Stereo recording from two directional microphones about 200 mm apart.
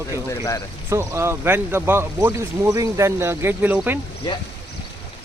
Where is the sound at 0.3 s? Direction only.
15° left (ahead or behind).